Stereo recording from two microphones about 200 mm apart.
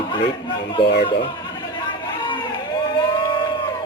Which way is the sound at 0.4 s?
60° left (ahead or behind).